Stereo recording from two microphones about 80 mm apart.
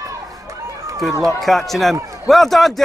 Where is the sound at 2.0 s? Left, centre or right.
Right.